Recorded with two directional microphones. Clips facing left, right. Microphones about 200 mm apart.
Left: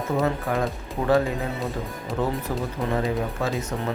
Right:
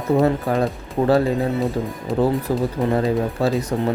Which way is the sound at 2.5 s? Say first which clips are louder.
Right 6 dB; 30° right (ahead or behind).